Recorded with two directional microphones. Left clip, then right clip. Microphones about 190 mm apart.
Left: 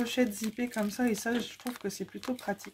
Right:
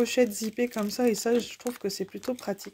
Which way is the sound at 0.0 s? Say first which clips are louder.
Right 6 dB; 40° right (ahead or behind).